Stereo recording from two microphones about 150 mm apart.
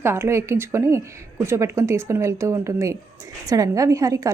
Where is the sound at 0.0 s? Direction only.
15° right (ahead or behind).